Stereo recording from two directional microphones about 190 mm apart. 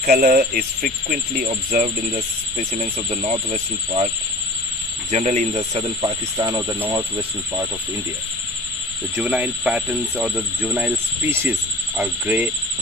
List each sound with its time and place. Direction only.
0.0 s speech: 50° right (ahead or behind); by 4.1 s 35° right (ahead or behind)
5.1 s speech: 40° right (ahead or behind)
6.0 s speech: 20° right (ahead or behind)
9.1 s speech: 10° right (ahead or behind)